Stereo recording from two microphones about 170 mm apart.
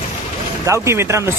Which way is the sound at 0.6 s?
15° right (ahead or behind).